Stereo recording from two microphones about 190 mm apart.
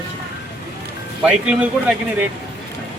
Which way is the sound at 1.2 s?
5° right (ahead or behind).